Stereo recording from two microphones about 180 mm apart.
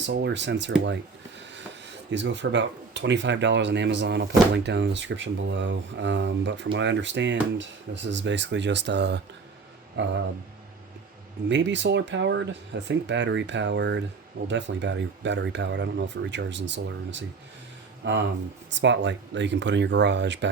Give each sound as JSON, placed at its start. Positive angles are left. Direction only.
{"t": 0.0, "sound": "speech", "side_deg": -70}
{"t": 10.0, "sound": "a man's voice", "side_deg": -90}
{"t": 11.4, "sound": "a man's voice", "side_deg": -85}